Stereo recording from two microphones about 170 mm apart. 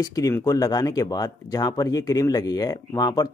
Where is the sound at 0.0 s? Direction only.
20° left (ahead or behind).